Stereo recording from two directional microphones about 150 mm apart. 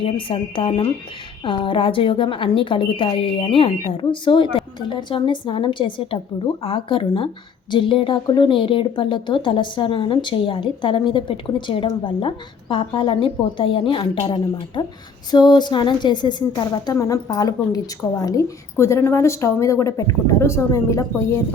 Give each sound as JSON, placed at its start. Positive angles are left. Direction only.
{"t": 0.0, "sound": "a woman's voice", "side_deg": 35}